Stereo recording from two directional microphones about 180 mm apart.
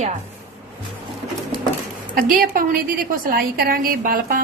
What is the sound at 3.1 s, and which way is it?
A woman's voice, 50° right (ahead or behind).